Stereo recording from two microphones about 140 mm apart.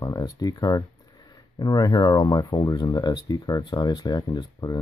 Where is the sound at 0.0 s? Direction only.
25° left (ahead or behind).